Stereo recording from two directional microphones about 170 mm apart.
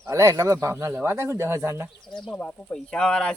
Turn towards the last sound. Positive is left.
turn(degrees=5)  # may be behind; listen again after turning